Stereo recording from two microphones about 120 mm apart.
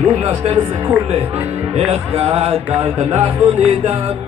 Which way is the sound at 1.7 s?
55° right (ahead or behind).